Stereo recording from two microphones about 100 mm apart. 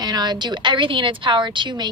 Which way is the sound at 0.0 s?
45° right (ahead or behind).